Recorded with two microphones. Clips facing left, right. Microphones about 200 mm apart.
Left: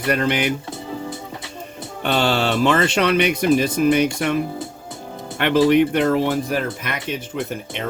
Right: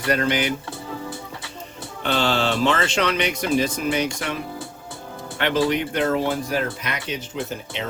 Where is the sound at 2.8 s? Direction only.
55° left (ahead or behind).